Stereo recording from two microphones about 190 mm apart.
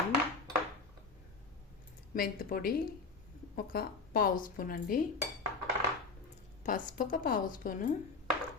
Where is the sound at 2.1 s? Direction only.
50° left (ahead or behind).